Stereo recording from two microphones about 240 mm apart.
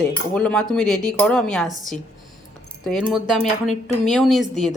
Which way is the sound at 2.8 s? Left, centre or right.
Centre.